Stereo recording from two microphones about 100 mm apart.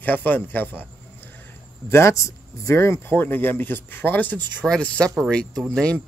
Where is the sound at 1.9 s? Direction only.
30° left (ahead or behind).